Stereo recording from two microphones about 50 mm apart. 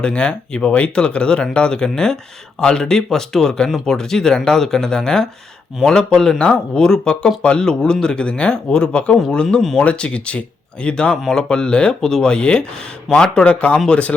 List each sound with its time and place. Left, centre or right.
0.0 s speech: centre
9.6 s speech: centre
9.8 s speech: left
11.1 s speech: centre; by 13.7 s left